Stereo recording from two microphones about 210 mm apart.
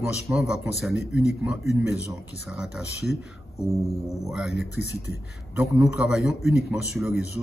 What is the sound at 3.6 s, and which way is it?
Music, 15° left (ahead or behind).